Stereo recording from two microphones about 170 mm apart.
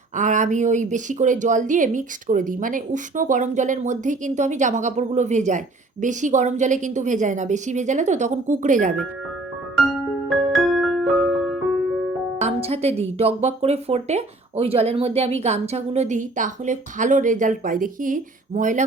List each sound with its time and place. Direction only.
0.2 s speech: 45° right (ahead or behind)
10.2 s music: centre (ahead or behind)
12.4 s a woman's voice: 40° right (ahead or behind)